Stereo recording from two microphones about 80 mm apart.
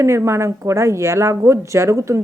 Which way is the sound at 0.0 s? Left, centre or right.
Right.